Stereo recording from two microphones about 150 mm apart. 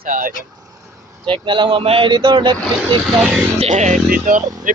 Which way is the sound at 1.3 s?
35° right (ahead or behind).